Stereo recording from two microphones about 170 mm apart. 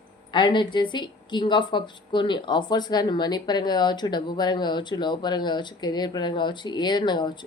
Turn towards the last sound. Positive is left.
turn(degrees=25)  # may be behind; listen again after turning